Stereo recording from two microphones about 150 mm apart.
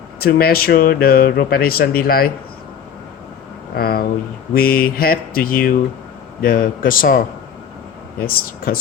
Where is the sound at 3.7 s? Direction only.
90° left; by 7.2 s 65° left (ahead or behind).